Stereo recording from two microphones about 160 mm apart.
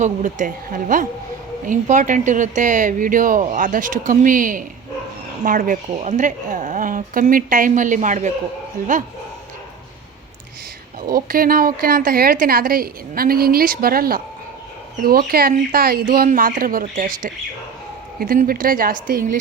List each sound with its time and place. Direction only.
0.0 s a woman's voice: 50° right (ahead or behind)
5.9 s speech: 45° right (ahead or behind)
8.8 s a woman's voice: 65° right (ahead or behind)
11.0 s a woman's voice: 65° right (ahead or behind)